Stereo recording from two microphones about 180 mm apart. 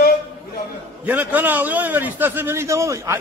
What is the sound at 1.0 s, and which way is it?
A man's voice, 10° right (ahead or behind).